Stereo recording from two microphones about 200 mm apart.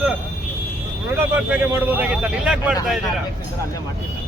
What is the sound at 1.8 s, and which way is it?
Speech, 10° right (ahead or behind).